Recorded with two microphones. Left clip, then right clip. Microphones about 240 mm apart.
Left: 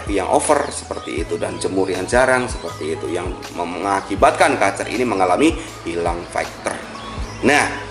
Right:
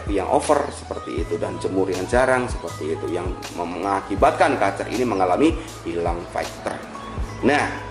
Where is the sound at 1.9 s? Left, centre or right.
Centre.